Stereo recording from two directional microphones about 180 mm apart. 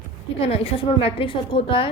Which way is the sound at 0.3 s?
30° left (ahead or behind).